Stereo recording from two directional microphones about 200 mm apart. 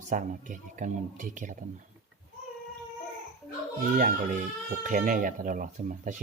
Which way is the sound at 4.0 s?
40° right (ahead or behind).